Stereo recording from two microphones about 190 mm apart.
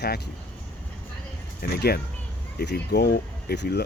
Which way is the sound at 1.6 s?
55° left (ahead or behind).